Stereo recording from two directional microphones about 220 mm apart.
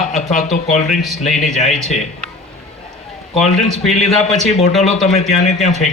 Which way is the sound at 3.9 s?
30° left (ahead or behind).